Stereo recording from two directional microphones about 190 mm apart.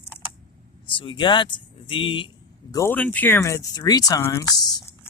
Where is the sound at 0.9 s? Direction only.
25° left (ahead or behind).